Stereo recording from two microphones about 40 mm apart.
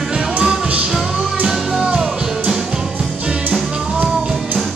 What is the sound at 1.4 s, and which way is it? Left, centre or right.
Music, centre.